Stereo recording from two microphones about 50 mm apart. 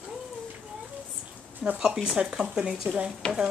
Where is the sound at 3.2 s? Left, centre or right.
Left.